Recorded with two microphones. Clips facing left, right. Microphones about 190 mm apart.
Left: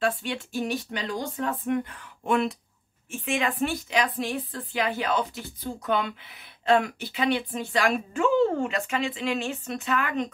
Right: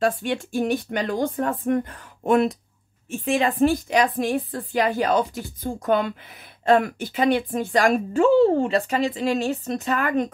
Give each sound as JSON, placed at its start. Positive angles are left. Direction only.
{"t": 0.0, "sound": "a woman's voice", "side_deg": -45}